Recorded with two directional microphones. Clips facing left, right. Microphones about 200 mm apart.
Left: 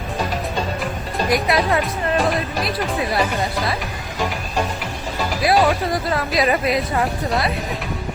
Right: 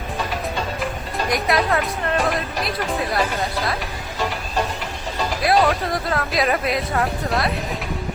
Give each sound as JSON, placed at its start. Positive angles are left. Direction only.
{"t": 1.3, "sound": "speech", "side_deg": 0}
{"t": 5.4, "sound": "speech", "side_deg": 5}